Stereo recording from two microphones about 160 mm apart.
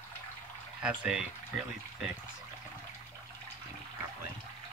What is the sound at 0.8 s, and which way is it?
Speech, 5° right (ahead or behind).